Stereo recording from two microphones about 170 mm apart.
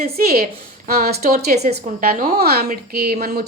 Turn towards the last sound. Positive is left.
turn(degrees=-65)  # may be behind; listen again after turning